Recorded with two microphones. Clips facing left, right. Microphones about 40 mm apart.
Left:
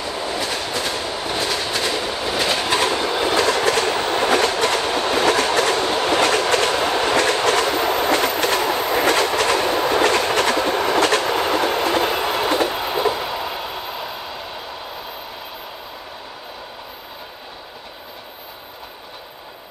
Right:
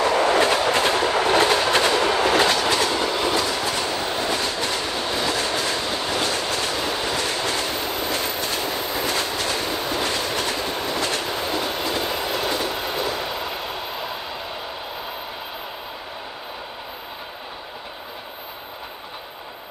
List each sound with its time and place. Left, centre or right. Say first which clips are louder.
0.0 s train: right 7 dB; right
0.4 s train: right 6 dB; right
1.1 s train: right 6 dB; right
1.5 s train: right 4 dB; right
2.0 s train: right 5 dB; right
2.7 s train: left 2 dB; left
3.1 s train: left 2 dB; left
3.3 s train: left 6 dB; left
12.3 s train: left 5 dB; left
12.7 s train: left 5 dB; left
13.2 s train: left 2 dB; centre